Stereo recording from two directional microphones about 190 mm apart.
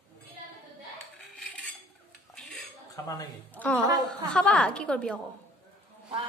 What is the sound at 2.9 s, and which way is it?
Speech, 15° left (ahead or behind).